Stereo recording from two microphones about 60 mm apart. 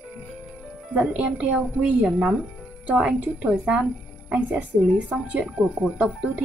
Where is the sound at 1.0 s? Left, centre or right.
Right.